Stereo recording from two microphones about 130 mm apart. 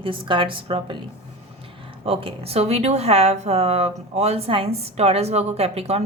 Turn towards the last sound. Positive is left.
turn(degrees=-50)  # may be behind; listen again after turning